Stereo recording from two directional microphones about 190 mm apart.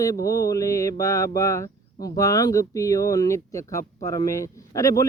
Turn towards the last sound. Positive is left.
turn(degrees=15)  # may be behind; listen again after turning